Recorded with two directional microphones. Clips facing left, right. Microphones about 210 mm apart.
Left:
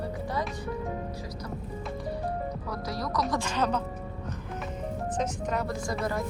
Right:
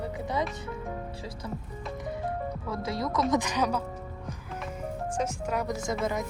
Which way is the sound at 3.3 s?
15° right (ahead or behind).